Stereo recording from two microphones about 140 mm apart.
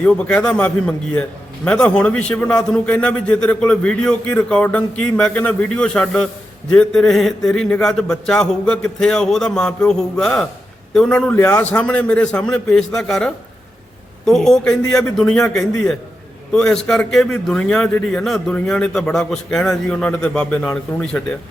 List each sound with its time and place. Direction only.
0.0 s a man's voice: 10° left (ahead or behind)